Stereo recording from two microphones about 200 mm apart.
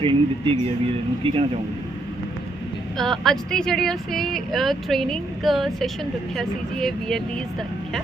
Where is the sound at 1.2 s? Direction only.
25° right (ahead or behind).